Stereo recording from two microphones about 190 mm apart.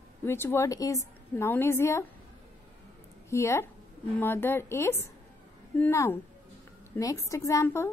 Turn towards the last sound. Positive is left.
turn(degrees=15)  # may be behind; listen again after turning